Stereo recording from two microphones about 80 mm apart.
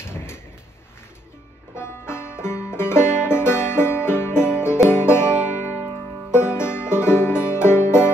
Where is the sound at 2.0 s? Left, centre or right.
Left.